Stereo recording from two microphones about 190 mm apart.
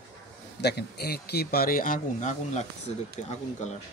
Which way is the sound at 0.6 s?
55° left (ahead or behind).